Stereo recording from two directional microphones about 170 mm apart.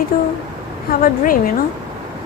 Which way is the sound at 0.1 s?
55° left (ahead or behind).